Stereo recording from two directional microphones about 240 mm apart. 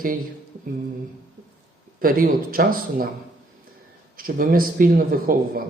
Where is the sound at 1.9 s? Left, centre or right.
Right.